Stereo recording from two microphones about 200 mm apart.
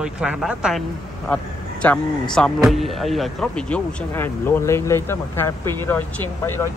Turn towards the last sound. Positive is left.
turn(degrees=10)  # may be behind; listen again after turning